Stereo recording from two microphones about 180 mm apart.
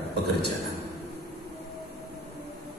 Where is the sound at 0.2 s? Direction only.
65° right (ahead or behind).